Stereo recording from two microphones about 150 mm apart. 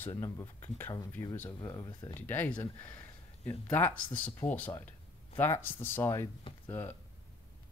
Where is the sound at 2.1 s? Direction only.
15° left (ahead or behind).